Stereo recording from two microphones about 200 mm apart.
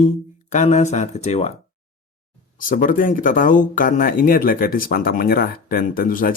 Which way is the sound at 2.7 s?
45° left (ahead or behind).